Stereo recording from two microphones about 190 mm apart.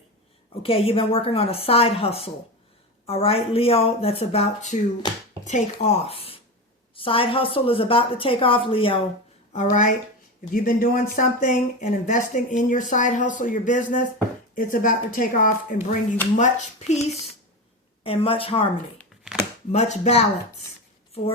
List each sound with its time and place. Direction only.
0.6 s a woman's voice: 30° left (ahead or behind)
5.0 s a woman's voice: 25° left (ahead or behind)
5.5 s a woman's voice: 35° left (ahead or behind)
9.5 s a woman's voice: 40° left (ahead or behind)
19.7 s a woman's voice: 35° left (ahead or behind)